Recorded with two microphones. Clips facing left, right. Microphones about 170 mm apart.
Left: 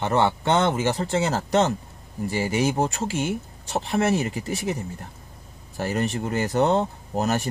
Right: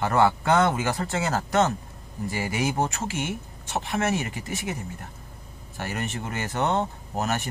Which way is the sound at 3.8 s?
35° left (ahead or behind).